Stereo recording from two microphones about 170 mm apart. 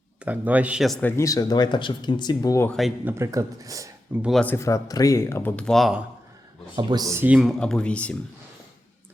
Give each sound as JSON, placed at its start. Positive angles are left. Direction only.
{"t": 0.3, "sound": "speech", "side_deg": -10}
{"t": 1.0, "sound": "speech", "side_deg": 15}
{"t": 2.6, "sound": "speech", "side_deg": 0}
{"t": 3.0, "sound": "speech", "side_deg": -15}
{"t": 4.2, "sound": "speech", "side_deg": 0}
{"t": 4.4, "sound": "speech", "side_deg": 15}
{"t": 6.7, "sound": "speech", "side_deg": -20}